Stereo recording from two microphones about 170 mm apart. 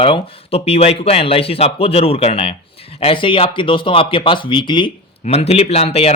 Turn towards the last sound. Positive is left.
turn(degrees=35)  # may be behind; listen again after turning